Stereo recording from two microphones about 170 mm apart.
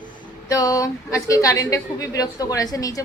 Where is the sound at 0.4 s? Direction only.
20° left (ahead or behind).